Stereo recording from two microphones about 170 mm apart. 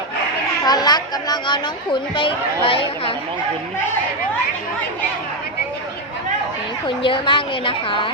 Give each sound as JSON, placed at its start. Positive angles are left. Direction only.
{"t": 0.6, "sound": "a woman's voice", "side_deg": 25}
{"t": 6.8, "sound": "a woman's voice", "side_deg": 30}